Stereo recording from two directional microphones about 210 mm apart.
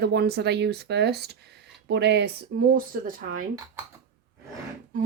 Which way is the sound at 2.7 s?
40° right (ahead or behind).